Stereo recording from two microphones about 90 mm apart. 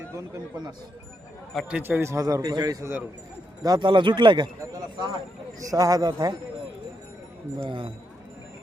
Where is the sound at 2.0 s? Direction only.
35° right (ahead or behind); by 4.5 s 55° right (ahead or behind).